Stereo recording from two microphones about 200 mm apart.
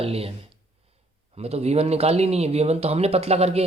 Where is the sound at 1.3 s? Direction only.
30° right (ahead or behind).